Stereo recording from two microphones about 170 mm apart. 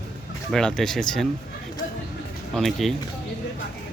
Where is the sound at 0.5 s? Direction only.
5° left (ahead or behind).